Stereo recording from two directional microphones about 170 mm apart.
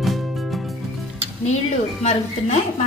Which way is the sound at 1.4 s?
40° left (ahead or behind).